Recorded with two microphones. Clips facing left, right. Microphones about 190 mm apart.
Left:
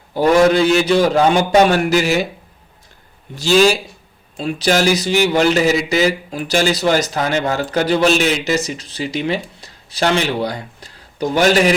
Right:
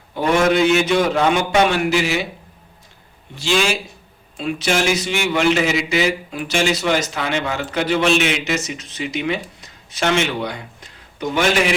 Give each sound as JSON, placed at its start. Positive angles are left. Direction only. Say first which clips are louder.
{"t": 0.1, "sound": "speech", "louder": "left 4 dB", "side_deg": 35}
{"t": 3.3, "sound": "speech", "louder": "left 7 dB", "side_deg": 40}